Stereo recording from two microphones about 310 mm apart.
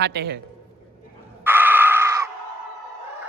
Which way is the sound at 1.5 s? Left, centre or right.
Centre.